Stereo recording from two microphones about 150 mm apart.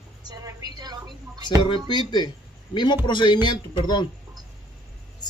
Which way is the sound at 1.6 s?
30° left (ahead or behind).